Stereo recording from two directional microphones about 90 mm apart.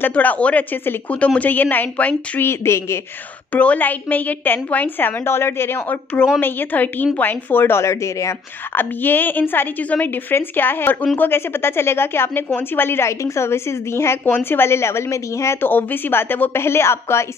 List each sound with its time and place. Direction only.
0.0 s a woman's voice: 20° left (ahead or behind)
3.5 s a woman's voice: 15° left (ahead or behind); by 8.4 s 35° left (ahead or behind)
8.7 s a woman's voice: 20° left (ahead or behind)
15.6 s a woman's voice: 20° left (ahead or behind)